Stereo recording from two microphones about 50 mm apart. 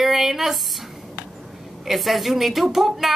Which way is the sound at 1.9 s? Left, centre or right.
Centre.